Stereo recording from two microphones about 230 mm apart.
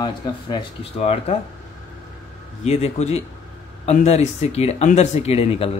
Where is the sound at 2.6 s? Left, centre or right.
Left.